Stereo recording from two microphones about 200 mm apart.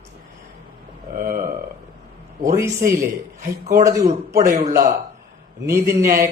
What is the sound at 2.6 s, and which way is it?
Speech, 15° right (ahead or behind).